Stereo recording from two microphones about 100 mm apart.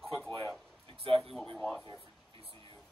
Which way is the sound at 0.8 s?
70° right (ahead or behind).